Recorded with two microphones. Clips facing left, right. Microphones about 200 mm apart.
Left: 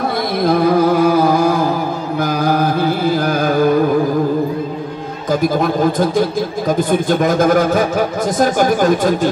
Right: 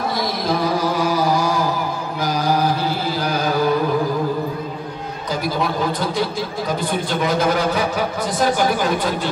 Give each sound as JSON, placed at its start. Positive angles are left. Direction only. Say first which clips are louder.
{"t": 0.4, "sound": "a sound", "louder": "left 9 dB", "side_deg": 55}
{"t": 2.2, "sound": "carnatic music", "louder": "left 2 dB", "side_deg": 55}
{"t": 5.3, "sound": "a man's voice", "louder": "left 7 dB", "side_deg": 50}